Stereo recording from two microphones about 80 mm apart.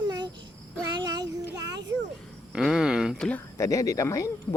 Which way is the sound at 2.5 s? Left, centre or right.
Centre.